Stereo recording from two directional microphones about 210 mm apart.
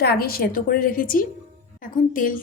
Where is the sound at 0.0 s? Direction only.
50° left (ahead or behind).